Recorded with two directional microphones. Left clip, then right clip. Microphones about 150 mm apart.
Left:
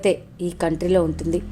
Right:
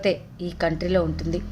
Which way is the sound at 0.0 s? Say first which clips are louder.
Left 3 dB; 35° left (ahead or behind).